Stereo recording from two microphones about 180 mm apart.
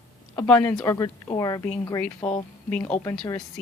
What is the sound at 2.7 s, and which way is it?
Speech, 10° left (ahead or behind).